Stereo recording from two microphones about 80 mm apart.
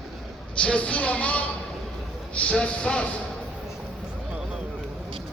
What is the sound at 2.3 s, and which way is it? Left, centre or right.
Speech, centre.